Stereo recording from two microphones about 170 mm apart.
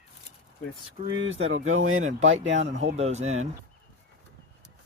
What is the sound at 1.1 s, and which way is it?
Speech, 90° right.